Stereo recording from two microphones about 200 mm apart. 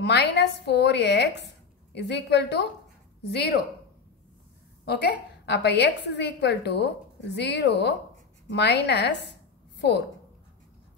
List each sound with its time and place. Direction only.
0.0 s a woman's voice: 60° left (ahead or behind)
5.4 s a woman's voice: 60° left (ahead or behind)